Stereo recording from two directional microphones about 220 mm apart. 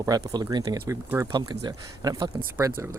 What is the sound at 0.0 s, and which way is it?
Speech, 15° right (ahead or behind).